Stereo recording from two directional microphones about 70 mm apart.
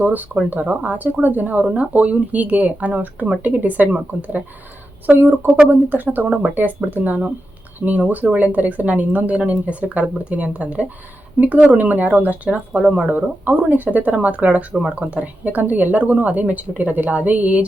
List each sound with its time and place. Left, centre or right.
0.0 s speech: right